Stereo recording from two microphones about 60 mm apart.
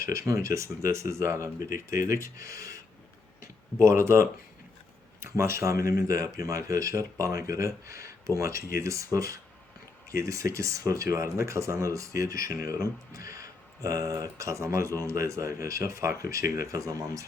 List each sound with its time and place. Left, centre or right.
0.0 s speech: right
3.8 s speech: right